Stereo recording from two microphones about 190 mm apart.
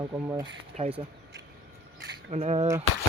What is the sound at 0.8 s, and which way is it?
Speech, 25° right (ahead or behind).